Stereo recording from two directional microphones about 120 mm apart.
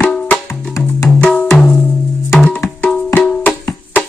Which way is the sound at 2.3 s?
5° left (ahead or behind).